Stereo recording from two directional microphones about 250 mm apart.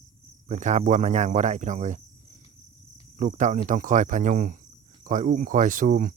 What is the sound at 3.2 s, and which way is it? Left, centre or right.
Speech, right.